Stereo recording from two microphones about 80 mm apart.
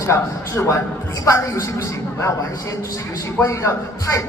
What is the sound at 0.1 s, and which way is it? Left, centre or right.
A man's voice, left.